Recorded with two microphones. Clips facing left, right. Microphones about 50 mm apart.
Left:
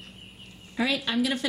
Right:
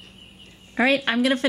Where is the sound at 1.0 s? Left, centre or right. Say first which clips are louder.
Right 6 dB; right.